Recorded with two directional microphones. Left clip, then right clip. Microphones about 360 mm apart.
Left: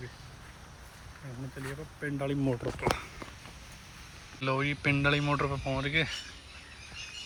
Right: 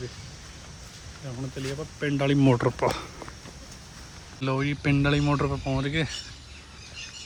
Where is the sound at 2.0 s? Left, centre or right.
Right.